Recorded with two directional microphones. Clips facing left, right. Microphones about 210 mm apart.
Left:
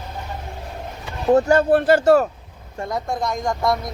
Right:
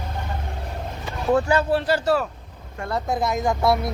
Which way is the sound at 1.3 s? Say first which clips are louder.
Left 5 dB; 45° left (ahead or behind).